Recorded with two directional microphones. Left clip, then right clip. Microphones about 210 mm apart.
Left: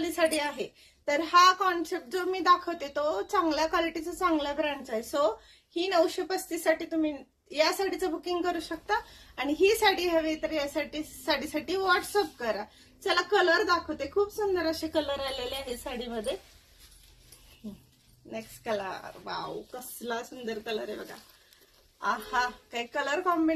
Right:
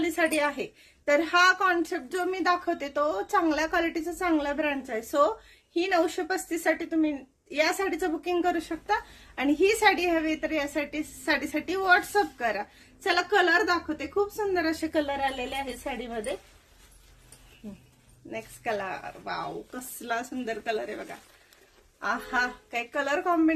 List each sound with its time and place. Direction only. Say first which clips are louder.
0.1 s a woman's voice: right 2 dB; 20° right (ahead or behind)
18.3 s a woman's voice: right 2 dB; 20° right (ahead or behind)
22.0 s a woman's voice: right 1 dB; 25° right (ahead or behind)